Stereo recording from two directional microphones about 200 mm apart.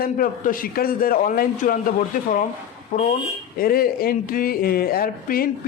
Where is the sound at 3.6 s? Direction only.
50° left (ahead or behind).